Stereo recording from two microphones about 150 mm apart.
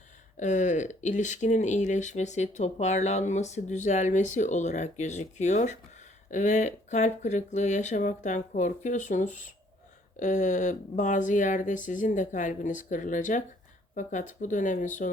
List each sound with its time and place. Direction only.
0.3 s speech: 55° left (ahead or behind)